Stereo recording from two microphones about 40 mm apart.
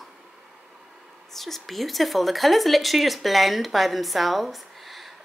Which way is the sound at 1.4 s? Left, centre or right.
Centre.